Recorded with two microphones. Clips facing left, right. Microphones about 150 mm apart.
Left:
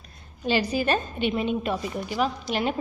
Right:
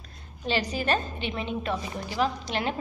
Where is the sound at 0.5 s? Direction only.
10° left (ahead or behind).